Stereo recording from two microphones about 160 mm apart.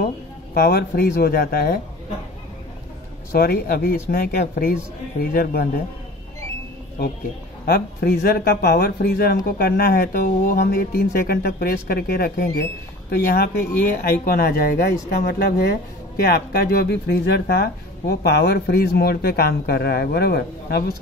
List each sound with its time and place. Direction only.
0.6 s speech: 75° left (ahead or behind)
3.3 s speech: 75° left (ahead or behind)
7.6 s speech: 85° left
16.2 s speech: 70° left (ahead or behind)